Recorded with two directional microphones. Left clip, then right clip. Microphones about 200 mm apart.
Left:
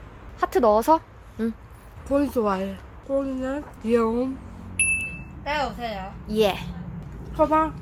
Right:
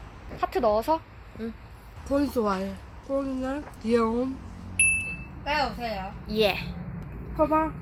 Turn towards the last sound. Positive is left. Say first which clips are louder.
# left 3 dB
turn(degrees=15)  # may be behind; listen again after turning